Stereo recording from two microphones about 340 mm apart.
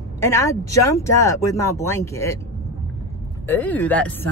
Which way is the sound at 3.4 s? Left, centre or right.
Centre.